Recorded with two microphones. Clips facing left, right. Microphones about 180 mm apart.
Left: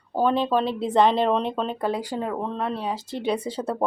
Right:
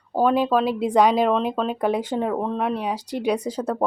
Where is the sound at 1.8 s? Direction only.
20° right (ahead or behind).